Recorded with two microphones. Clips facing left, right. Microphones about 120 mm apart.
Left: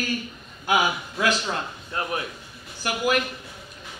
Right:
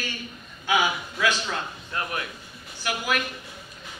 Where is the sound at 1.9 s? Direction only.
30° left (ahead or behind).